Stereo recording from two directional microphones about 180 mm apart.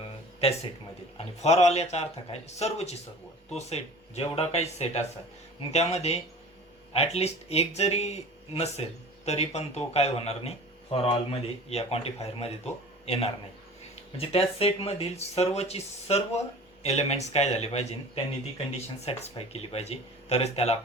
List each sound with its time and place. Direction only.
0.3 s speech: 35° left (ahead or behind)
14.2 s speech: 30° left (ahead or behind)